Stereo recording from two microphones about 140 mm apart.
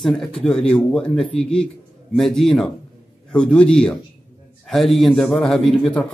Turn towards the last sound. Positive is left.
turn(degrees=5)  # may be behind; listen again after turning